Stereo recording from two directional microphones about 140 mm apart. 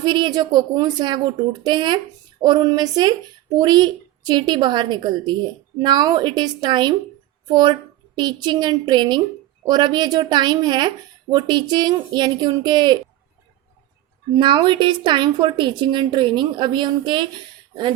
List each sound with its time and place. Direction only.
0.0 s a woman's voice: 35° right (ahead or behind)
14.3 s a woman's voice: 35° right (ahead or behind)